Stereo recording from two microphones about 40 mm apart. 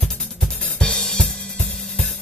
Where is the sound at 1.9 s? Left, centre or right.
Centre.